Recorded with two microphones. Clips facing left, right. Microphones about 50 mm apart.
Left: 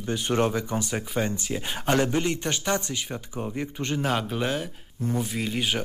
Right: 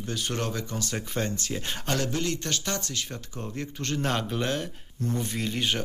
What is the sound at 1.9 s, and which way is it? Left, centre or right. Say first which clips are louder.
A man's voice: left 5 dB; left.